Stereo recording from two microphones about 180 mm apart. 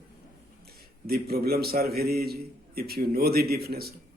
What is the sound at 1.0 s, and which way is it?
A man's voice, 60° right (ahead or behind).